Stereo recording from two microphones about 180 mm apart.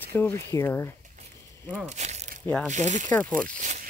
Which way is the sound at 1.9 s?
40° right (ahead or behind).